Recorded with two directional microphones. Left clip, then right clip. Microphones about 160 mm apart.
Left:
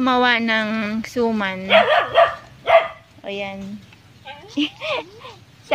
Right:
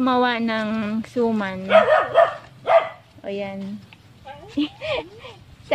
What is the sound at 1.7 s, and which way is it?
Dog, 70° right (ahead or behind).